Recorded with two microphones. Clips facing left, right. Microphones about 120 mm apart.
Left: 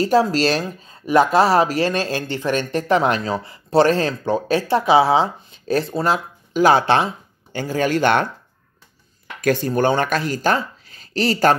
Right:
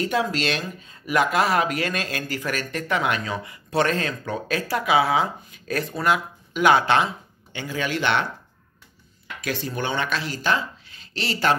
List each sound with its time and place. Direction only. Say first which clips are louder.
0.0 s speech: left 7 dB; 35° left (ahead or behind)
9.4 s speech: left 10 dB; 45° left (ahead or behind)